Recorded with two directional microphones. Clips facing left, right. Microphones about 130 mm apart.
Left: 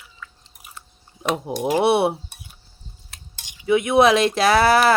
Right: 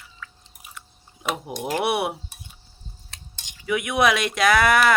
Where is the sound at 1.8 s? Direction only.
30° left (ahead or behind).